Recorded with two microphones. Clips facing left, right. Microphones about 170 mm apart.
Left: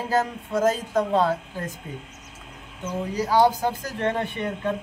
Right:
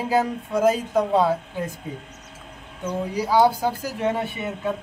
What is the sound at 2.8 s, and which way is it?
Speech, 10° right (ahead or behind).